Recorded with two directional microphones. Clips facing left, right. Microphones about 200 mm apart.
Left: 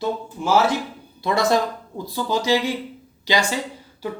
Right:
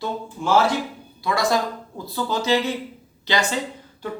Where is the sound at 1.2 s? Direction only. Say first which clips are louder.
Left 2 dB; 25° left (ahead or behind).